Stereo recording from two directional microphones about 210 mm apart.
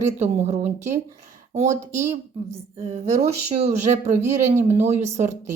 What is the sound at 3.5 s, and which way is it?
Speech, 30° right (ahead or behind).